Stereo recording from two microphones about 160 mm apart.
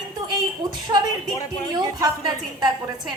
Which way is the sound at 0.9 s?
20° right (ahead or behind).